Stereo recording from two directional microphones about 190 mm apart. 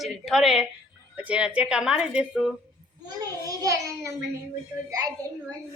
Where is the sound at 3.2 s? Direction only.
20° right (ahead or behind).